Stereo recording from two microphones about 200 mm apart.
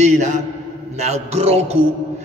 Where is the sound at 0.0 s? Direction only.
35° right (ahead or behind).